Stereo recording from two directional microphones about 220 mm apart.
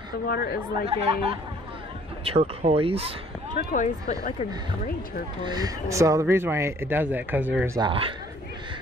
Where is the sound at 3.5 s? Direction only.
35° left (ahead or behind).